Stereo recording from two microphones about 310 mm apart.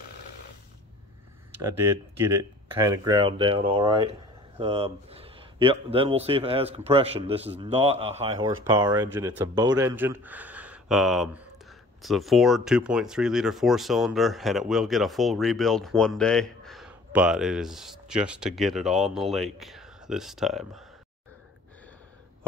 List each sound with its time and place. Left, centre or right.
2.8 s speech: centre